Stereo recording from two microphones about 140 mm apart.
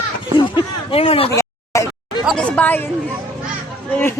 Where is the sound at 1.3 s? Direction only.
20° left (ahead or behind).